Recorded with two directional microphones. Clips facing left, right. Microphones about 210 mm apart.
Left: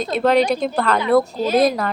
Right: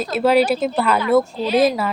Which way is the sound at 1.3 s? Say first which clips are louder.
Left 1 dB; 45° left (ahead or behind).